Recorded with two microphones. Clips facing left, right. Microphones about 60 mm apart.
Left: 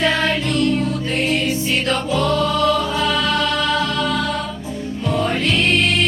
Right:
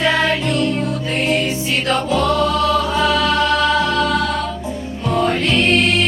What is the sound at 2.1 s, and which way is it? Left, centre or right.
Music, centre.